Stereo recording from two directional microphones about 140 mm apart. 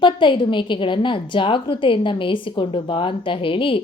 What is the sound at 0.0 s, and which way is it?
A woman's voice, 35° left (ahead or behind).